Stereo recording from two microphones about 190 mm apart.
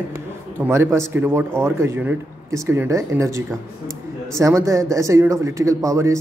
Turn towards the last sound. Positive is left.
turn(degrees=-15)  # may be behind; listen again after turning